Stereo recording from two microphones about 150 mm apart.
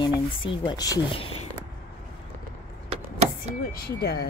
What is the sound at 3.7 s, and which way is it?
Speech, 90° left.